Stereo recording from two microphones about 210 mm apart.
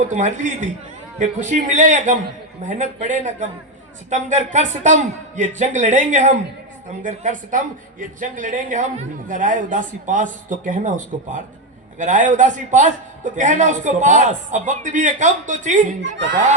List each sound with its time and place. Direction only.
0.1 s a man's voice: 35° right (ahead or behind)
16.0 s speech: 55° right (ahead or behind)